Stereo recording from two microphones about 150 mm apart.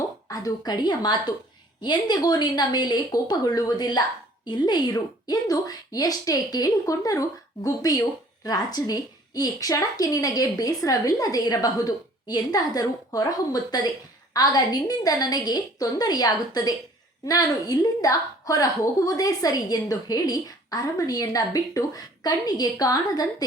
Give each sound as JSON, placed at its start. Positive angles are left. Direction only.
{"t": 0.3, "sound": "a woman's voice", "side_deg": 25}